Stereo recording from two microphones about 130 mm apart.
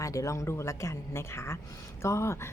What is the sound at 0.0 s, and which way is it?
A woman's voice, 25° left (ahead or behind).